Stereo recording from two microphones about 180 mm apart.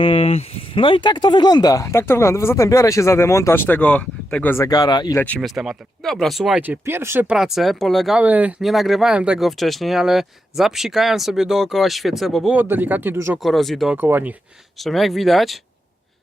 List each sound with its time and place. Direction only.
0.0 s speech: 30° left (ahead or behind)
5.1 s speech: 10° left (ahead or behind)
12.5 s speech: 10° right (ahead or behind)
13.4 s speech: centre (ahead or behind)
13.9 s speech: 10° right (ahead or behind)
14.8 s speech: centre (ahead or behind)